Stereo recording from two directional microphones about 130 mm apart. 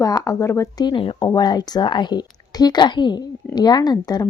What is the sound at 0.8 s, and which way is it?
Speech, 40° left (ahead or behind).